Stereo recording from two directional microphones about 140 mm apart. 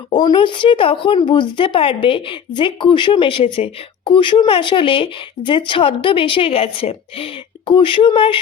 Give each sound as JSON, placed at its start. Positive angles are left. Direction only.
{"t": 0.1, "sound": "speech", "side_deg": 35}